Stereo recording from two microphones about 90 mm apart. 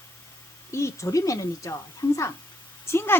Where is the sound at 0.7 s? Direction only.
35° left (ahead or behind).